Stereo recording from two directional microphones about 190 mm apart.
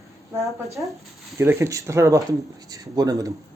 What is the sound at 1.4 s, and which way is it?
Speech, 15° right (ahead or behind).